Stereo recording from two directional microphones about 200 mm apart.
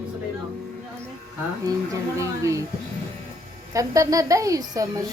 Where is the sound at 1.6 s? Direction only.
15° right (ahead or behind).